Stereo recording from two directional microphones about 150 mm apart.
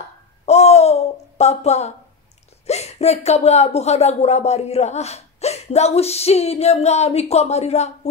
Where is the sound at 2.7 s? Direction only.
45° left (ahead or behind).